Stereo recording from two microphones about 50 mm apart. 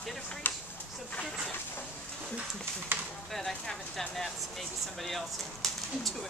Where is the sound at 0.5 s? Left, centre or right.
Left.